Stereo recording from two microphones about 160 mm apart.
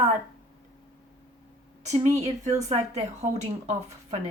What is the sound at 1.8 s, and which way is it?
Speech, 45° right (ahead or behind).